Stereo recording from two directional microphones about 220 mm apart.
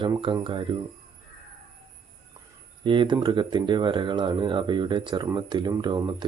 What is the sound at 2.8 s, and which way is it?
Speech, 20° right (ahead or behind).